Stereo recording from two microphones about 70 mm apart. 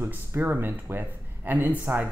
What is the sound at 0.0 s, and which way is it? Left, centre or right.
Speech, right.